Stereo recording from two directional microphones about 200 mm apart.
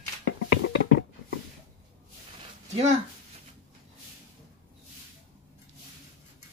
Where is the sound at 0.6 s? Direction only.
60° left (ahead or behind).